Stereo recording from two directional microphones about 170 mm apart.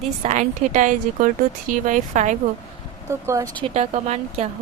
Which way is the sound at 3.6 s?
40° right (ahead or behind).